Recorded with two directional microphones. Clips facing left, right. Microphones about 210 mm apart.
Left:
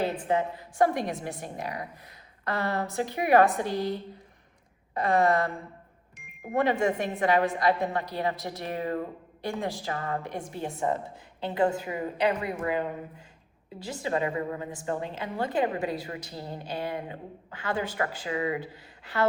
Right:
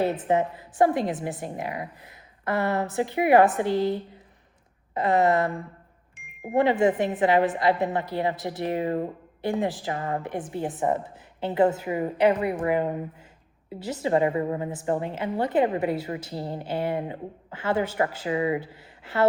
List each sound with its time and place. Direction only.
0.0 s a woman's voice: 25° right (ahead or behind)
4.9 s a woman's voice: 20° right (ahead or behind)